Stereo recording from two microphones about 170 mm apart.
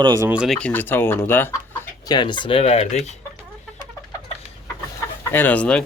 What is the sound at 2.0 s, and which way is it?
Speech, 25° left (ahead or behind).